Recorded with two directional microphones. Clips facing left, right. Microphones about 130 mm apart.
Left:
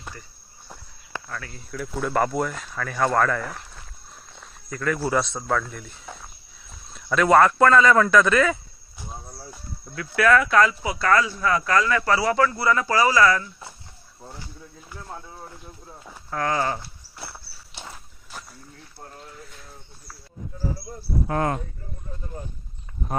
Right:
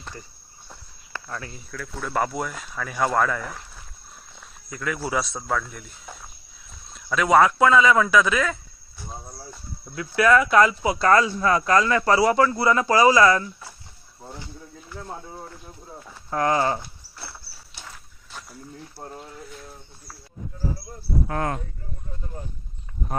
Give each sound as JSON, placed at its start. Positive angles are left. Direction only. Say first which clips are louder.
{"t": 1.3, "sound": "speech", "louder": "right 4 dB", "side_deg": -25}
{"t": 1.7, "sound": "speech", "louder": "left 6 dB", "side_deg": 15}
{"t": 2.0, "sound": "speech", "louder": "left 2 dB", "side_deg": 0}
{"t": 9.9, "sound": "speech", "louder": "right 1 dB", "side_deg": -15}
{"t": 10.8, "sound": "speech", "louder": "right 3 dB", "side_deg": -30}
{"t": 16.3, "sound": "speech", "louder": "right 3 dB", "side_deg": -25}
{"t": 21.2, "sound": "speech", "louder": "left 4 dB", "side_deg": 25}